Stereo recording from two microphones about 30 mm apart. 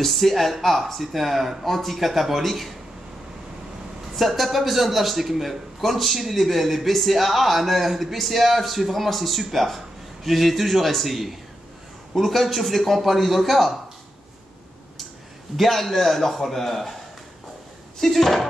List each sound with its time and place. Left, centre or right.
0.0 s a man's voice: centre
4.1 s a man's voice: centre
15.5 s a man's voice: centre
18.0 s a man's voice: centre